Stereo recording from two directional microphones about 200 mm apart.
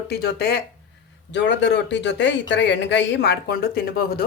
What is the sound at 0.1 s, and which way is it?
Speech, 55° left (ahead or behind).